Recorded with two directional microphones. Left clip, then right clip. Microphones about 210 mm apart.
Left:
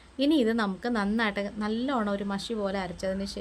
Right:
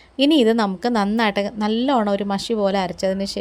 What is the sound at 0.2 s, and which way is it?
A woman's voice, 30° right (ahead or behind).